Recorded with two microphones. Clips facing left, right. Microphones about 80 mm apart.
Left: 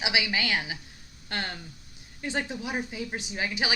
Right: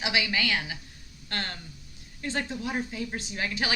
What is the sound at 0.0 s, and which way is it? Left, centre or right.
Speech, centre.